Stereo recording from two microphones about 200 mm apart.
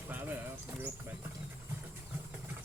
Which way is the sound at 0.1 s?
10° right (ahead or behind).